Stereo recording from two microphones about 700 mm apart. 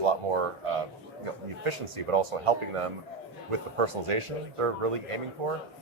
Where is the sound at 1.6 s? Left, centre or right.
Right.